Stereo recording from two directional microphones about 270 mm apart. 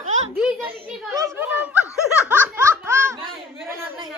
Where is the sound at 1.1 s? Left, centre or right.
Centre.